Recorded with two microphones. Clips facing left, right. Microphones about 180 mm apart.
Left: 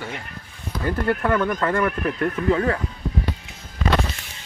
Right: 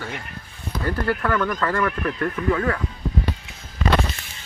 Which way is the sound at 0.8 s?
25° left (ahead or behind).